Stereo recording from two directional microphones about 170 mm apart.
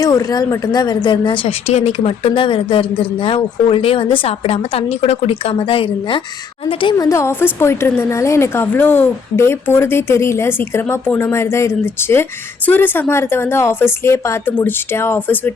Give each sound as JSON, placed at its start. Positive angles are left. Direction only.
{"t": 0.0, "sound": "a woman's voice", "side_deg": 20}
{"t": 7.1, "sound": "speech", "side_deg": 15}